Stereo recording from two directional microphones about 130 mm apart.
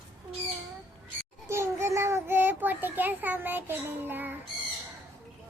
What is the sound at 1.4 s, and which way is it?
Child singing, 20° right (ahead or behind).